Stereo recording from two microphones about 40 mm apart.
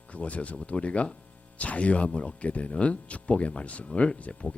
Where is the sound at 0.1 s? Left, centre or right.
Left.